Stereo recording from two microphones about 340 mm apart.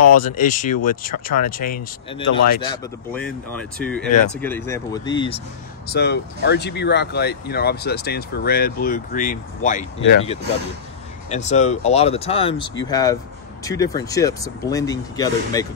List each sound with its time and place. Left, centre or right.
0.2 s speech: left
5.9 s speech: left; by 15.6 s centre